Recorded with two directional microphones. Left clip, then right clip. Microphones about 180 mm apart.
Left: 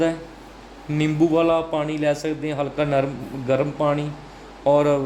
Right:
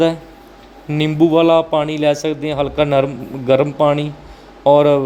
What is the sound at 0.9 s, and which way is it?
A man's voice, 30° right (ahead or behind).